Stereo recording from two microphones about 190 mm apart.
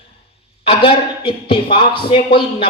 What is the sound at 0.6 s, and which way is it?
A woman's voice, 25° left (ahead or behind).